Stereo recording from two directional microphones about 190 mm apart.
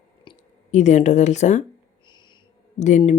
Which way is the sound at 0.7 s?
40° left (ahead or behind).